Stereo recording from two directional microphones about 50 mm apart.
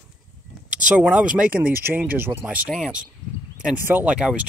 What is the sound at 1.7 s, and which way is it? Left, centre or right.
Speech, right.